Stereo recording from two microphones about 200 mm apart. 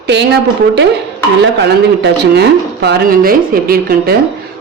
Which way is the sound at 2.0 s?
55° right (ahead or behind).